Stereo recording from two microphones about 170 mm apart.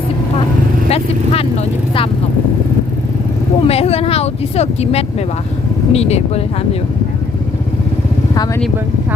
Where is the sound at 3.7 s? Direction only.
35° left (ahead or behind).